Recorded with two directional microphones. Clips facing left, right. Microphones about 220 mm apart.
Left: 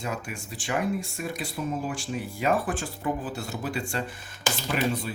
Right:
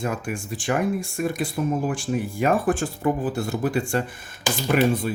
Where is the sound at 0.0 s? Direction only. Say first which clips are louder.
Right 6 dB; 50° right (ahead or behind).